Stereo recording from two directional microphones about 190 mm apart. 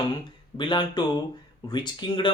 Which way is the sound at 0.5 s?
25° left (ahead or behind).